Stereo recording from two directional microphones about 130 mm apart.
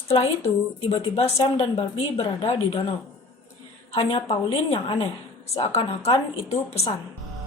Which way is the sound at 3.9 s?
50° left (ahead or behind).